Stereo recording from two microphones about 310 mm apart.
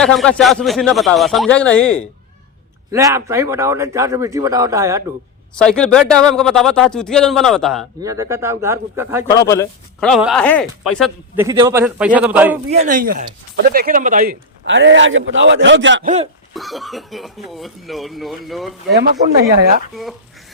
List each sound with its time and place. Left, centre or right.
0.0 s a man's voice: centre
2.9 s a man's voice: centre
5.5 s a man's voice: centre
8.0 s a man's voice: centre
9.3 s a man's voice: centre
11.4 s a man's voice: centre
12.7 s a man's voice: right
16.0 s speech: right
16.6 s a man's voice: centre
19.9 s a man's voice: centre